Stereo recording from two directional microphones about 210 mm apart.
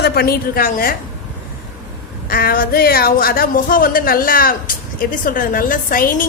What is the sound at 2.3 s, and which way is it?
Speech, 45° left (ahead or behind).